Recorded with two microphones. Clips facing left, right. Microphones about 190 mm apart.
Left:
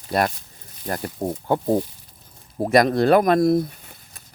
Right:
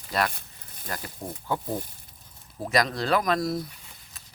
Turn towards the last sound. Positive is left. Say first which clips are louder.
# left 5 dB
turn(degrees=55)  # may be behind; listen again after turning